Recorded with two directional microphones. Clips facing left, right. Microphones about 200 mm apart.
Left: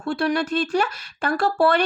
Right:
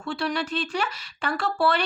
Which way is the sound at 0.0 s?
50° left (ahead or behind).